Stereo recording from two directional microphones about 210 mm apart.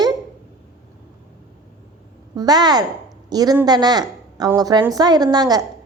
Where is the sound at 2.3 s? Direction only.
20° right (ahead or behind).